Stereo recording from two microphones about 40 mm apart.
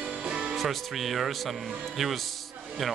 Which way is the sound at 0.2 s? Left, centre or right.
Right.